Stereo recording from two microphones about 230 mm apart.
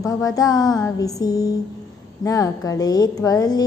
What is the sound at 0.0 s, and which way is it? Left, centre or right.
Speech, centre.